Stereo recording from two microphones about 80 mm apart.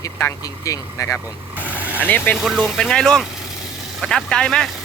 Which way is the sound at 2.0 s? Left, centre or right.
Left.